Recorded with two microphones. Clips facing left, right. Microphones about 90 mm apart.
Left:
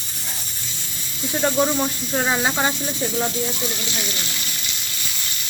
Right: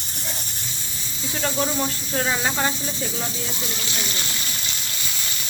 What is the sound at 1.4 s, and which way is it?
Speech, 20° left (ahead or behind).